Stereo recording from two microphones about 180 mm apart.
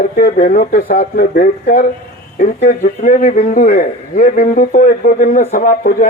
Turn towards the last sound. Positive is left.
turn(degrees=50)  # may be behind; listen again after turning